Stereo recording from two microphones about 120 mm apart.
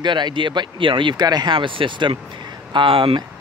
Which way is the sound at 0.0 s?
40° right (ahead or behind).